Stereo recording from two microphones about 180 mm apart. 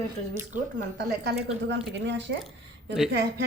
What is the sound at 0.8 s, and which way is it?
Speech, 65° right (ahead or behind).